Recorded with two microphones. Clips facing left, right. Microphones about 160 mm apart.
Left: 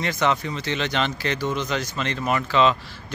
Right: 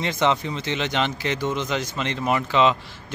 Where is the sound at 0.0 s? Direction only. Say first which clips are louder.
Right 1 dB; 20° right (ahead or behind).